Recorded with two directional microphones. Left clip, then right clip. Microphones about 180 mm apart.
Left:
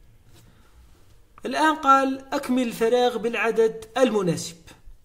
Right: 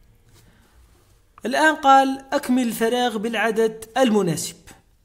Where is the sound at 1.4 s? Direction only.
25° right (ahead or behind).